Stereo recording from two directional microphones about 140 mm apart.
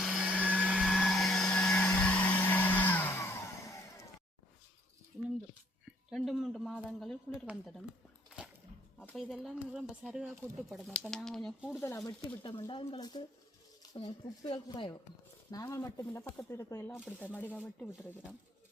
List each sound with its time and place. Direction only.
0.0 s blender: 5° right (ahead or behind); by 4.1 s 20° left (ahead or behind)
5.8 s speech: centre (ahead or behind)
9.0 s speech: centre (ahead or behind)
10.3 s speech: 15° right (ahead or behind)
10.7 s speech: centre (ahead or behind)
11.8 s speech: 20° left (ahead or behind); by 14.9 s 35° left (ahead or behind)
15.4 s speech: 25° left (ahead or behind)